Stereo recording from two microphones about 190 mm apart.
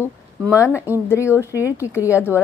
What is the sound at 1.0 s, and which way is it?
Speech, 15° left (ahead or behind).